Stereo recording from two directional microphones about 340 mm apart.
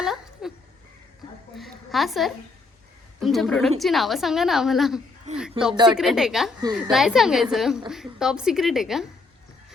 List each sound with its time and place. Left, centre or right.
0.0 s a sound: centre
1.5 s a sound: centre
3.2 s a woman's voice: centre
5.7 s a child's voice: centre
6.0 s a woman's voice: centre
6.7 s a child's voice: centre
6.9 s a woman's voice: centre